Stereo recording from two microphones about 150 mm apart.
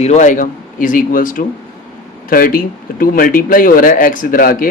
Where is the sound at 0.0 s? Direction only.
50° left (ahead or behind).